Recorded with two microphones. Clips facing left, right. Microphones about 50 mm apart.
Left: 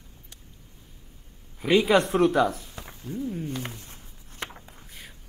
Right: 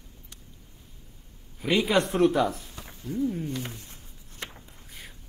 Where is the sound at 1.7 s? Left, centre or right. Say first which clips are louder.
Left 3 dB; centre.